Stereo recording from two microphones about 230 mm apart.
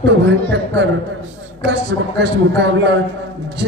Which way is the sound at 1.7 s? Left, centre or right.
Right.